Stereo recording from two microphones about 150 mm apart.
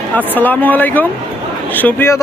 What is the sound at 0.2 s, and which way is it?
Speech, 10° left (ahead or behind).